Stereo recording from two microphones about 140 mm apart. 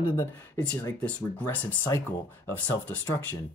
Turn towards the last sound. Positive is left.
turn(degrees=10)  # may be behind; listen again after turning